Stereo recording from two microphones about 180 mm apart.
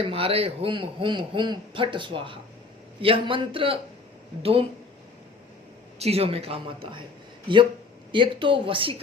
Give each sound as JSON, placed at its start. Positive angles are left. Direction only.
{"t": 0.0, "sound": "a man's voice", "side_deg": -30}
{"t": 6.0, "sound": "a woman's voice", "side_deg": -35}